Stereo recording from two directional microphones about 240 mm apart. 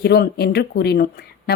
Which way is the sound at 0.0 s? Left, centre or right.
Left.